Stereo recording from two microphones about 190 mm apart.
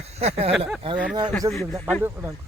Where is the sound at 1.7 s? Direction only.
5° left (ahead or behind).